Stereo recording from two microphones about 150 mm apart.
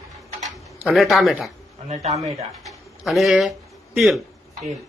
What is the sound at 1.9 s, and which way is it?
Speech, 45° right (ahead or behind).